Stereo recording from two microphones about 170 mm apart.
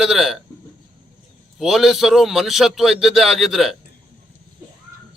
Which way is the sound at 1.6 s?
Centre (ahead or behind).